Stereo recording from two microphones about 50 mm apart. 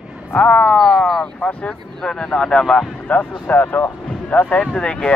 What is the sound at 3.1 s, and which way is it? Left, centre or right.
Speech, left.